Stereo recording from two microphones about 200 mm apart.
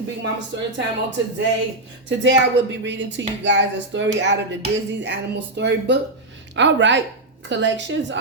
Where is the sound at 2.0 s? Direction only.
65° right (ahead or behind).